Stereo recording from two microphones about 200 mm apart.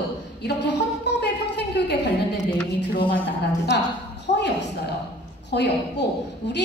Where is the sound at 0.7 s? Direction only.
60° left (ahead or behind).